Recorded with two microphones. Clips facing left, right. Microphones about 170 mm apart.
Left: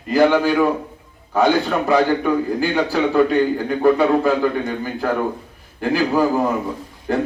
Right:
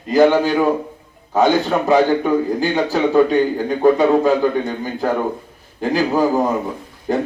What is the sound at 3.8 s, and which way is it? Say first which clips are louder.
A man's voice: right 2 dB; 15° right (ahead or behind).